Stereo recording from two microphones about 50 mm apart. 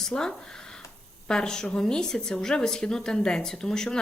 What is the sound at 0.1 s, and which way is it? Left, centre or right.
Speech, left.